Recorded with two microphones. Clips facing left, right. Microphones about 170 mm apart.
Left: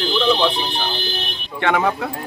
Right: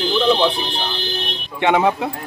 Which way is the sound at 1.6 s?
20° right (ahead or behind).